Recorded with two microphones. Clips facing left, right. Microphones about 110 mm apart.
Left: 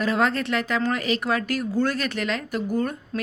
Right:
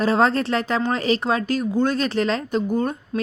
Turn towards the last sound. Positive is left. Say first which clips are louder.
# right 3 dB
turn(degrees=-20)  # may be behind; listen again after turning